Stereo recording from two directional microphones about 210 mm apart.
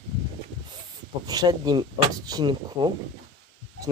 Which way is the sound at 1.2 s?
20° right (ahead or behind).